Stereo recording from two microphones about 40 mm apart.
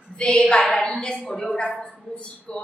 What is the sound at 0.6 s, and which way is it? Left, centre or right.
A woman's voice, centre.